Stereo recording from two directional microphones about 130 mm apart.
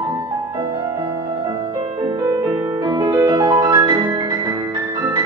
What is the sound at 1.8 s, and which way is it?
Music, 45° right (ahead or behind).